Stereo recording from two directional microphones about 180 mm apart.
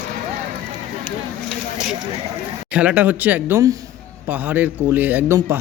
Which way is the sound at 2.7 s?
5° right (ahead or behind).